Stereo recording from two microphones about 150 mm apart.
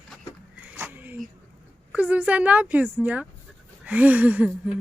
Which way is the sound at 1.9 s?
10° right (ahead or behind).